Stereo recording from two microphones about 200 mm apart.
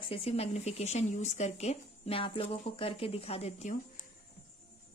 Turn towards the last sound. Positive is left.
turn(degrees=35)  # may be behind; listen again after turning